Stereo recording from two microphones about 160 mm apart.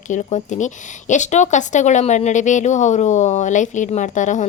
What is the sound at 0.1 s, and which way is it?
Speech, 50° left (ahead or behind).